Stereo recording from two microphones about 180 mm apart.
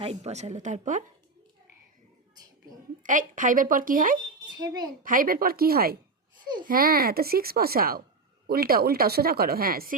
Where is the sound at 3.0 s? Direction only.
45° right (ahead or behind).